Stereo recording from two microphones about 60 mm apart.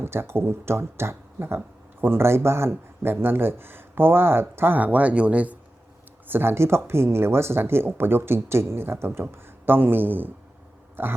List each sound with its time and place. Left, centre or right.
0.0 s speech: right
6.2 s speech: right